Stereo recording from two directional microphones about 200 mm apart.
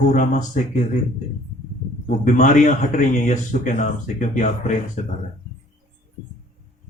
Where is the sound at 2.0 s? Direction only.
40° left (ahead or behind).